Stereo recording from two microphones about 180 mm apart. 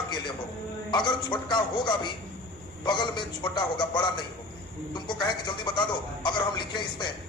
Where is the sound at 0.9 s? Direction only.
25° left (ahead or behind).